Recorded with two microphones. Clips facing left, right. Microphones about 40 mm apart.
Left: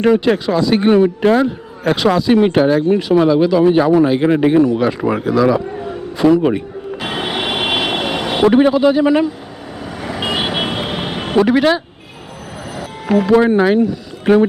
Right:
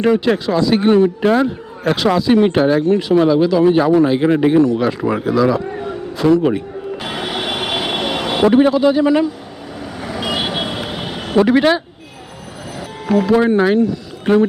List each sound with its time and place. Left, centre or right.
0.0 s speech: centre
7.0 s vehicle: left
8.0 s vehicle: centre
8.5 s speech: centre
9.8 s vehicle: centre
10.6 s vehicle: left
11.3 s speech: centre
13.4 s speech: centre